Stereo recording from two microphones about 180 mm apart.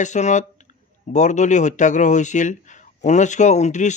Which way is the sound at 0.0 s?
40° left (ahead or behind).